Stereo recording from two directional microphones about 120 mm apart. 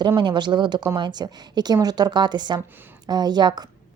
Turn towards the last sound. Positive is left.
turn(degrees=-35)  # may be behind; listen again after turning